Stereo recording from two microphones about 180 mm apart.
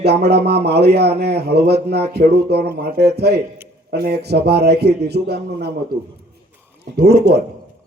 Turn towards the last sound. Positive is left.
turn(degrees=-65)  # may be behind; listen again after turning